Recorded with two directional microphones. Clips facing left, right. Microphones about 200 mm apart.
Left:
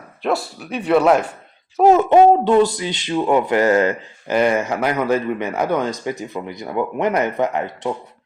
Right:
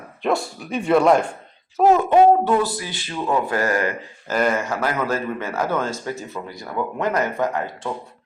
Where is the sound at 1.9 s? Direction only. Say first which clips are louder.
Left 2 dB; 20° left (ahead or behind).